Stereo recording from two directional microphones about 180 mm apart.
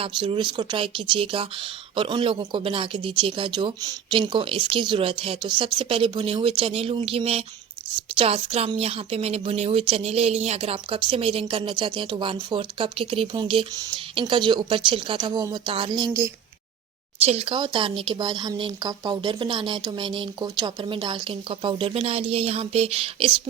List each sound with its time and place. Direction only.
0.0 s a woman's voice: 30° right (ahead or behind)
17.2 s speech: 30° right (ahead or behind)